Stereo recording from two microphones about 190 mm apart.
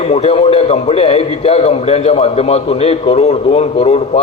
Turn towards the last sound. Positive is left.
turn(degrees=35)  # may be behind; listen again after turning